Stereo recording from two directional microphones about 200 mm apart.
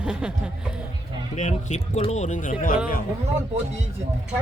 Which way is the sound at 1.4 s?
35° left (ahead or behind).